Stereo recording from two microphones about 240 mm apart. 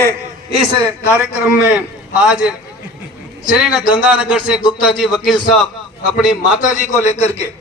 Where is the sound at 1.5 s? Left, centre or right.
Centre.